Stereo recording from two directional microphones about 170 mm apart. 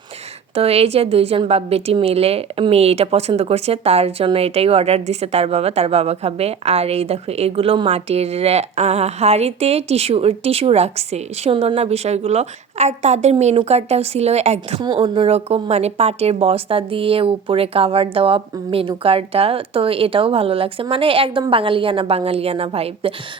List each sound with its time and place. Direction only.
0.5 s a woman's voice: 35° right (ahead or behind)